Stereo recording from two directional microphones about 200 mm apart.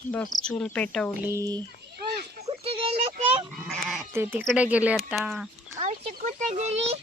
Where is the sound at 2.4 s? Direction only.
30° right (ahead or behind).